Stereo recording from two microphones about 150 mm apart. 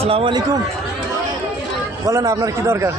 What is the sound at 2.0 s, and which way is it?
Speech, 20° right (ahead or behind).